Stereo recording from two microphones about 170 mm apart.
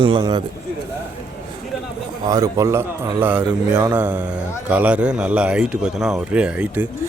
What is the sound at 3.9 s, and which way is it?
Speech, 10° right (ahead or behind).